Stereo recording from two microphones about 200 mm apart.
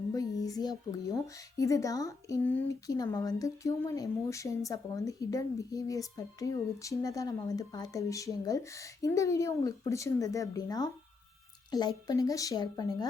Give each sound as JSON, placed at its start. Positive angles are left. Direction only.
{"t": 0.1, "sound": "a woman's voice", "side_deg": 20}